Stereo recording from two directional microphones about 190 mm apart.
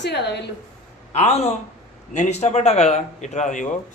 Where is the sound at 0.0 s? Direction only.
65° left (ahead or behind).